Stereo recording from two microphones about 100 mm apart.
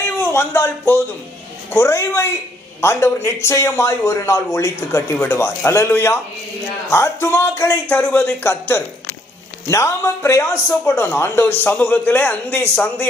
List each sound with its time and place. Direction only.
0.2 s a man's voice: 25° left (ahead or behind)